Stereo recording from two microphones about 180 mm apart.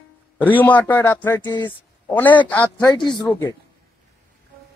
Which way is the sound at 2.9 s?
25° left (ahead or behind).